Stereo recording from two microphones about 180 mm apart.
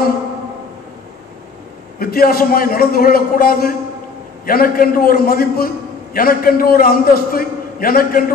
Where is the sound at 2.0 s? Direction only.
55° left (ahead or behind).